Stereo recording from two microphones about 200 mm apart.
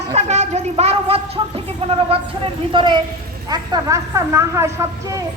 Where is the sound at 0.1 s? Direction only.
35° right (ahead or behind).